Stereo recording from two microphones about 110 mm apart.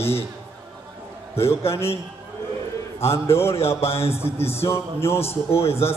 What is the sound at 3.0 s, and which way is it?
Mantra, 25° left (ahead or behind).